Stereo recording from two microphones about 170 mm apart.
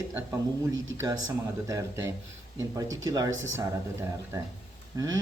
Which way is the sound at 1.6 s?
20° right (ahead or behind).